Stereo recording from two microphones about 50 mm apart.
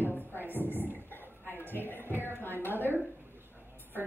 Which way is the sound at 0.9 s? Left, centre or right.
Left.